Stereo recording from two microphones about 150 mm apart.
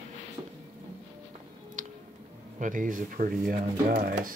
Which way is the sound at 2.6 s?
65° right (ahead or behind).